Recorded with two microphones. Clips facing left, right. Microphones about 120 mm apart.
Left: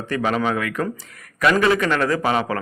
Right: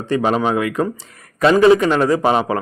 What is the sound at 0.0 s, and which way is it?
A man's voice, 25° right (ahead or behind).